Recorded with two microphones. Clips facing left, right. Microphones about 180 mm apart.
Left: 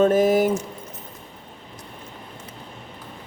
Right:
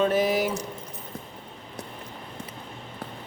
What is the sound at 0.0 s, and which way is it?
Speech, 45° left (ahead or behind).